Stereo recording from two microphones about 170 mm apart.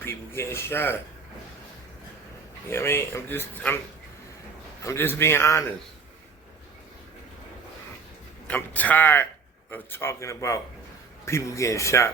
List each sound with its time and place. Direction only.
0.0 s speech: 15° left (ahead or behind)
2.6 s speech: 15° left (ahead or behind)
4.8 s speech: 15° left (ahead or behind)
8.4 s speech: 10° left (ahead or behind)